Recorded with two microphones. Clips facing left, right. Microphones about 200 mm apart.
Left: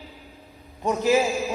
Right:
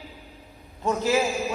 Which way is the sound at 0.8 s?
15° left (ahead or behind).